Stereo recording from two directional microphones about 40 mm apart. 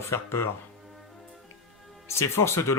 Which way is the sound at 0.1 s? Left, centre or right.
Left.